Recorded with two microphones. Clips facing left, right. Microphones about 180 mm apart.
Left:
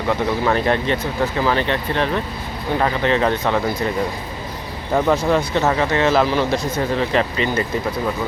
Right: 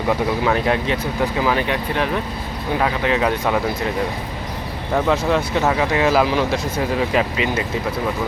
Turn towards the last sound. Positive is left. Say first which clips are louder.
# even
turn(degrees=-5)  # may be behind; listen again after turning